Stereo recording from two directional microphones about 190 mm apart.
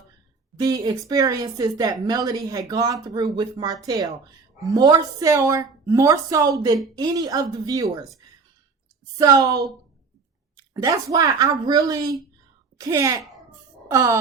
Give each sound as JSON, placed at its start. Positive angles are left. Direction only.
{"t": 0.5, "sound": "a woman's voice", "side_deg": -20}
{"t": 9.1, "sound": "a woman's voice", "side_deg": -20}